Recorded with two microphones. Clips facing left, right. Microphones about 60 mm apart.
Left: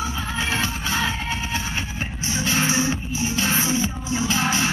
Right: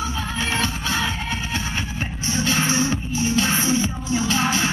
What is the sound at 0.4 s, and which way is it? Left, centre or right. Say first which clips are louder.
Music: right 1 dB; centre.